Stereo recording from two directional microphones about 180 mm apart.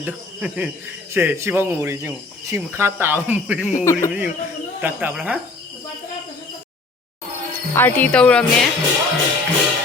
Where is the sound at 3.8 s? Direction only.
15° left (ahead or behind).